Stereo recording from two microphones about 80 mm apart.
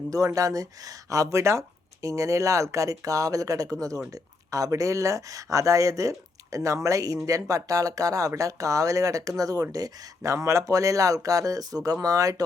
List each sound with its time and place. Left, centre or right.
0.1 s speech: right